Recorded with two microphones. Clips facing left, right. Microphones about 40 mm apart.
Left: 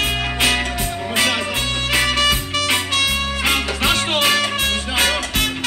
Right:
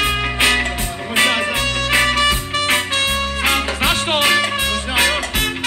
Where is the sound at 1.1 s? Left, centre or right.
Right.